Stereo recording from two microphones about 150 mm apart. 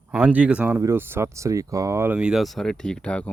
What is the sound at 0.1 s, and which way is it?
Speech, 10° right (ahead or behind).